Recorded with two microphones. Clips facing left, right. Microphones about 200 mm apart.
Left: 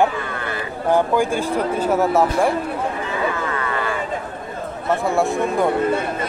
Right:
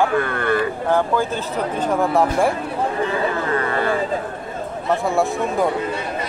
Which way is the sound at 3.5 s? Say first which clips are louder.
Right 4 dB; 35° right (ahead or behind).